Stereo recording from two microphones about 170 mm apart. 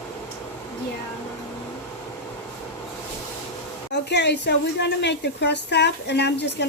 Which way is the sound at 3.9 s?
90° left.